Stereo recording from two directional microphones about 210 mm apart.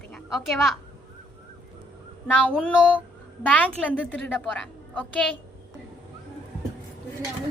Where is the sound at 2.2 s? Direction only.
5° right (ahead or behind).